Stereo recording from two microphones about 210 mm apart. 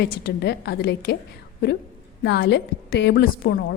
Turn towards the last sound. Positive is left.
turn(degrees=50)  # may be behind; listen again after turning